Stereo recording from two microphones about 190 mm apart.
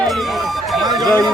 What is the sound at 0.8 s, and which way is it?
Speech, 20° right (ahead or behind).